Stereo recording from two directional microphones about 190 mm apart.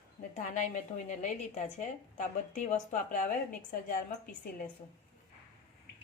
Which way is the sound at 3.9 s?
45° left (ahead or behind).